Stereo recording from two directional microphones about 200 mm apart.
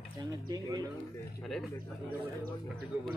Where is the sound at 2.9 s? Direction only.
10° right (ahead or behind).